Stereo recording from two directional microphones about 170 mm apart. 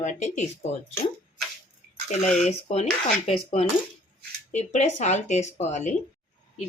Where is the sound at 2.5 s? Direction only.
40° left (ahead or behind).